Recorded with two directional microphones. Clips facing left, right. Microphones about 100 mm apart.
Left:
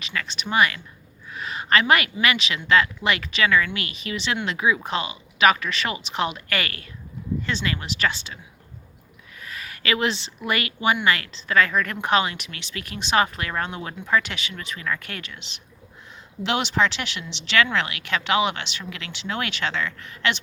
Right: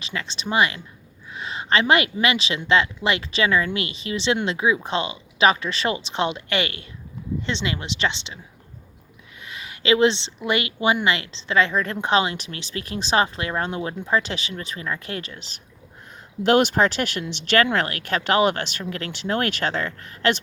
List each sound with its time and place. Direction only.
0.0 s speech: 25° right (ahead or behind)
9.4 s speech: 20° right (ahead or behind); by 15.6 s 40° right (ahead or behind)
16.4 s speech: 50° right (ahead or behind)